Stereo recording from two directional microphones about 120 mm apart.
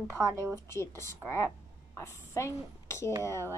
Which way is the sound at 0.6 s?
20° left (ahead or behind).